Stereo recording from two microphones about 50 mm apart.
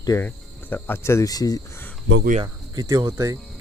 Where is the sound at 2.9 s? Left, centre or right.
Right.